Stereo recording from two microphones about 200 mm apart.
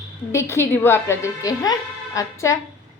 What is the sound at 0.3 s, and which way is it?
A woman's voice, 15° left (ahead or behind).